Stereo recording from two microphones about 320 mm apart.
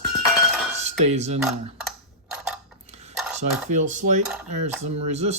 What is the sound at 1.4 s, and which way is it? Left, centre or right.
Speech, centre.